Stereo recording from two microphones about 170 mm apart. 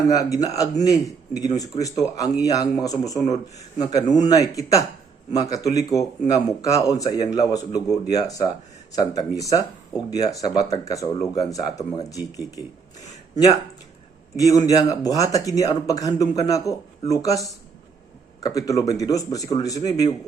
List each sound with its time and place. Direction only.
0.2 s speech: 20° left (ahead or behind)
14.3 s speech: 20° left (ahead or behind)